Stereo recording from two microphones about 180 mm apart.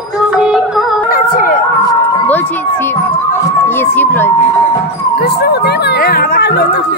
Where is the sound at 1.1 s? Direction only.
50° left (ahead or behind).